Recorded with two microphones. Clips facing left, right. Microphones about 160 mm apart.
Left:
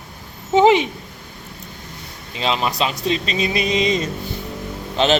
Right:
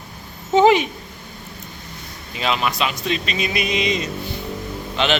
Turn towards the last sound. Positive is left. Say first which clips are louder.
# left 3 dB
turn(degrees=35)  # may be behind; listen again after turning